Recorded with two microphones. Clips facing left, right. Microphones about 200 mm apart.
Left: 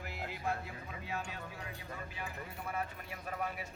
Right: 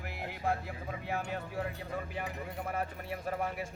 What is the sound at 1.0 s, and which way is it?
Music, 55° right (ahead or behind).